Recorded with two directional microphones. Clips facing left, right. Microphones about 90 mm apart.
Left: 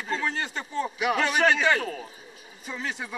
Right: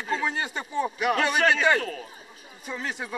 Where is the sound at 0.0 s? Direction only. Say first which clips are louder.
Right 1 dB; 10° right (ahead or behind).